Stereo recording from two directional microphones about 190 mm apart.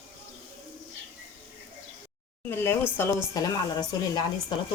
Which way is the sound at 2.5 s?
10° left (ahead or behind).